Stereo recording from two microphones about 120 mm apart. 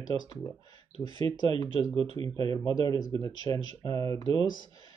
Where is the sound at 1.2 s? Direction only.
35° left (ahead or behind).